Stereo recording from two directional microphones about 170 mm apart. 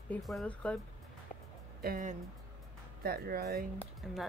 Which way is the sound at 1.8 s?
60° right (ahead or behind).